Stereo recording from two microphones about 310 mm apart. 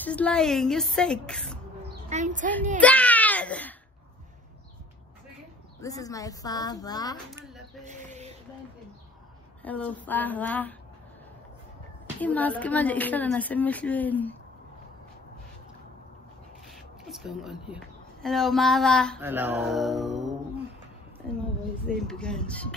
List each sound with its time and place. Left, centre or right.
0.0 s a woman's voice: centre
1.8 s a sound: right
2.8 s baby cry: centre
5.8 s speech: centre
7.3 s speech: centre
7.8 s a sound: right
9.6 s a woman's voice: centre
12.2 s a woman's voice: centre
16.6 s speech: centre
21.8 s a woman's voice: centre